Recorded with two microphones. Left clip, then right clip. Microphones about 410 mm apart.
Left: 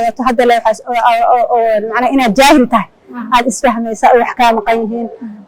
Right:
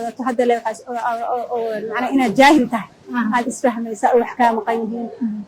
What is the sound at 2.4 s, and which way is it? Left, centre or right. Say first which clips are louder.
Speech: left 4 dB; left.